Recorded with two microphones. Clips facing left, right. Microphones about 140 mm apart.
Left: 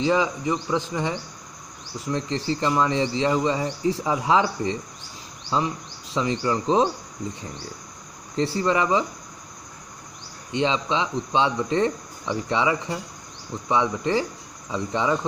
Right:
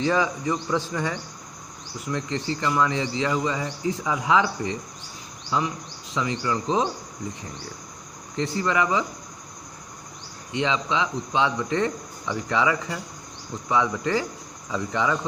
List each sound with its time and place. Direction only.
0.0 s cricket: 20° left (ahead or behind)
2.0 s speech: 30° left (ahead or behind)
8.4 s speech: 30° left (ahead or behind)
10.5 s speech: 30° left (ahead or behind)